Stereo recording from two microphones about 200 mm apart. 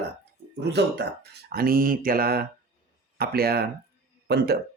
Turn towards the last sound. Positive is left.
turn(degrees=-55)  # may be behind; listen again after turning